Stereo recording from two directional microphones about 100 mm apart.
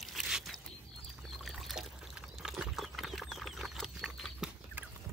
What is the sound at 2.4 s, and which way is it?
Horse, 5° right (ahead or behind).